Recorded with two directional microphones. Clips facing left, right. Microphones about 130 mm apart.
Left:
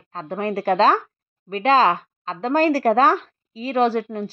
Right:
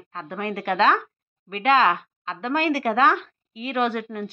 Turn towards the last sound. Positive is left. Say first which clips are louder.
# left 5 dB
turn(degrees=30)  # may be behind; listen again after turning